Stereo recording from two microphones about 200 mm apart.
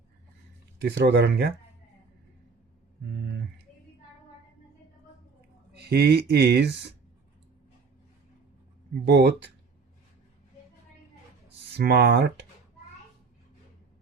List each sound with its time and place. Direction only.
0.9 s speech: 55° right (ahead or behind)
5.7 s speech: 55° right (ahead or behind)
9.0 s speech: 55° right (ahead or behind)
11.8 s speech: 55° right (ahead or behind)